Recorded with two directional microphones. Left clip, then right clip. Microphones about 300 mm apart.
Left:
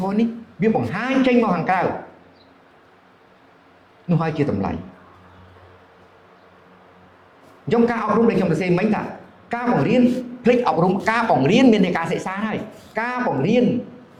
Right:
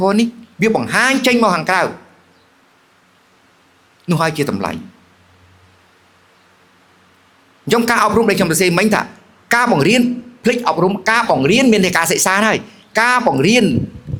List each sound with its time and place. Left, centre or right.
0.0 s speech: right
4.1 s speech: right
7.7 s speech: right
10.4 s speech: right
12.9 s speech: right